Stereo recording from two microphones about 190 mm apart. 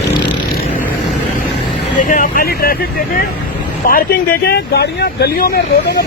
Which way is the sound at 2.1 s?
45° left (ahead or behind).